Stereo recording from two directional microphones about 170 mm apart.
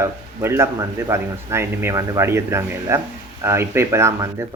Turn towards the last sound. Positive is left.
turn(degrees=-15)  # may be behind; listen again after turning